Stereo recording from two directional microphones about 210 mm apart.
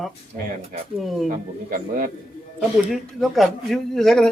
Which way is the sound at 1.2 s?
40° right (ahead or behind).